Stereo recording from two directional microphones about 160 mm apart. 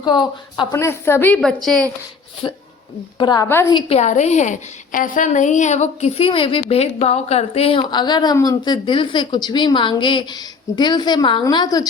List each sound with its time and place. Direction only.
0.0 s a woman's voice: 25° left (ahead or behind); by 1.9 s 5° left (ahead or behind)
2.4 s a woman's voice: 25° left (ahead or behind)